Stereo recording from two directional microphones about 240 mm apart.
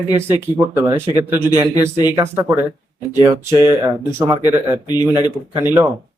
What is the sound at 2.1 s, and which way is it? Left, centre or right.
Speech, centre.